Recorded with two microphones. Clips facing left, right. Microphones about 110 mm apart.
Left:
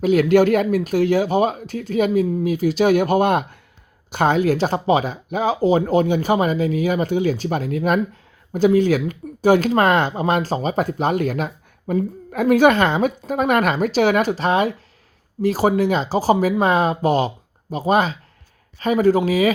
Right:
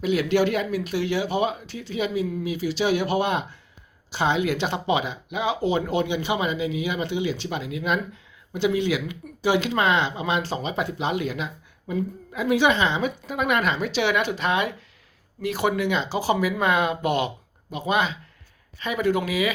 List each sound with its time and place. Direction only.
0.0 s speech: 45° left (ahead or behind)